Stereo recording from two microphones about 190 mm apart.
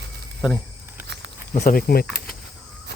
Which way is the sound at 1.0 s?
65° right (ahead or behind).